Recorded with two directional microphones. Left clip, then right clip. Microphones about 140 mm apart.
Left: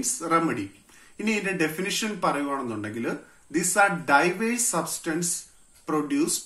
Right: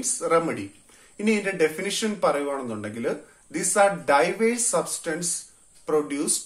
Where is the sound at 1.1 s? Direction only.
35° right (ahead or behind).